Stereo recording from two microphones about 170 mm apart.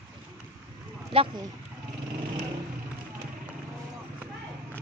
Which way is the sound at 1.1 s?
35° right (ahead or behind).